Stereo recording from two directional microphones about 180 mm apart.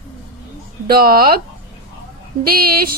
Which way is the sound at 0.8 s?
55° right (ahead or behind).